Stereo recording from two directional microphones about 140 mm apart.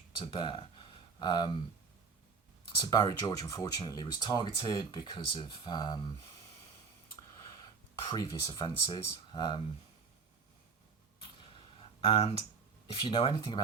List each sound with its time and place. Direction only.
0.2 s speech: 35° left (ahead or behind)
2.8 s speech: 25° left (ahead or behind)
7.3 s speech: 25° left (ahead or behind)
11.8 s a sound: 40° left (ahead or behind)
12.9 s speech: 35° left (ahead or behind)